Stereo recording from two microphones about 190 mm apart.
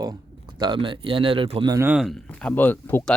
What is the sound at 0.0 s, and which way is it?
Speech, 20° right (ahead or behind).